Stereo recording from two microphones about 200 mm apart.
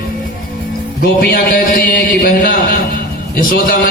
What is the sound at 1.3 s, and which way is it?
A man's voice, 45° left (ahead or behind).